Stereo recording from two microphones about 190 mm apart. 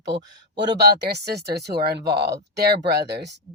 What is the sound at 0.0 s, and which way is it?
Speech, 65° right (ahead or behind).